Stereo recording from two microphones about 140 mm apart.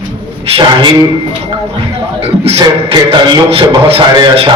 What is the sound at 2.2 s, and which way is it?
Beatboxing, 45° right (ahead or behind).